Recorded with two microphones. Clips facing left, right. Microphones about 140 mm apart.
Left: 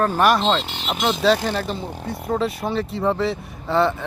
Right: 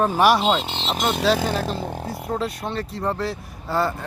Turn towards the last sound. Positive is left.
turn(degrees=-5)  # may be behind; listen again after turning